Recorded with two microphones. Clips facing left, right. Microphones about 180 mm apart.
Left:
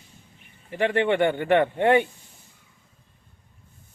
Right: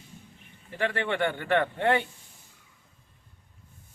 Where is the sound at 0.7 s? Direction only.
20° left (ahead or behind).